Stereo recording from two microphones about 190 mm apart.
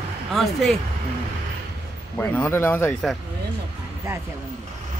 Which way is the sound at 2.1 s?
10° left (ahead or behind).